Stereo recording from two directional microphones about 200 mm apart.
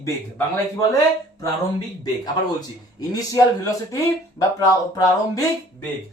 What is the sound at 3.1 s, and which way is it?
Speech, 15° left (ahead or behind).